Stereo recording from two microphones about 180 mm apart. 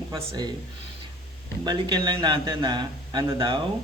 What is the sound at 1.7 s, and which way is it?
Speech, 25° right (ahead or behind).